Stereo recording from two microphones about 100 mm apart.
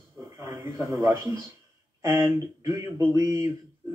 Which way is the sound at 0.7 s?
25° right (ahead or behind).